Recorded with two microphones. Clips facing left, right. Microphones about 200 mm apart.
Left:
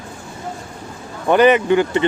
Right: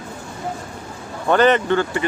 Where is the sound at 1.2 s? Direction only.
10° left (ahead or behind).